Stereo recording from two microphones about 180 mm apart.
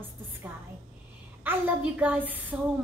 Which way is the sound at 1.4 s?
10° right (ahead or behind).